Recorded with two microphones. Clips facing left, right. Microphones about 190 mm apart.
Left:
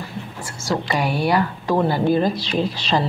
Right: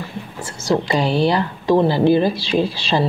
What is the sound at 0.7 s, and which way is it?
Speech, 25° right (ahead or behind).